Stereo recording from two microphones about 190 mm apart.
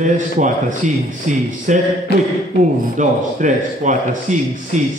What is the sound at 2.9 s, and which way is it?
A man's voice, 40° right (ahead or behind).